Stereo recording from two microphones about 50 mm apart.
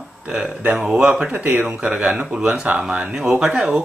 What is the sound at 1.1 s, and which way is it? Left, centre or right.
Speech, right.